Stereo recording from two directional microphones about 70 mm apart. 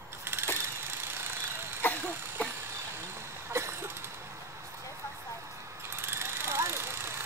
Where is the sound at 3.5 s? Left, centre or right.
Right.